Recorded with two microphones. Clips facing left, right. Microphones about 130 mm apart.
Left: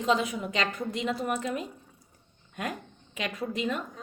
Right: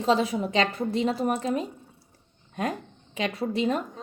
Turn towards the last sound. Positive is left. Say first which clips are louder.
# right 5 dB
turn(degrees=-35)  # may be behind; listen again after turning